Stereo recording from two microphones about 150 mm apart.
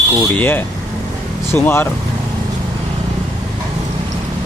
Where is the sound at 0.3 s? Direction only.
10° left (ahead or behind).